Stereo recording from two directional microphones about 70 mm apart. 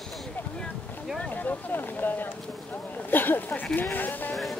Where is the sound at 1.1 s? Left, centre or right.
Left.